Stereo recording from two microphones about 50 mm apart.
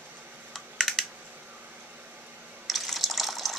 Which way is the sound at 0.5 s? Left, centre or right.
Centre.